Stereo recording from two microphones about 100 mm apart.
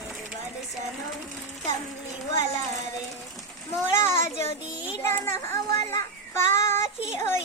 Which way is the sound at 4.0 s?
25° left (ahead or behind).